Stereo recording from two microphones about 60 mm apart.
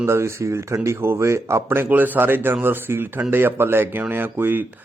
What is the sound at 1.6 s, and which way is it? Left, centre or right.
Speech, right.